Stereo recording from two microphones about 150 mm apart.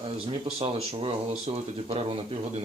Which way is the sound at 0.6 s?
45° right (ahead or behind).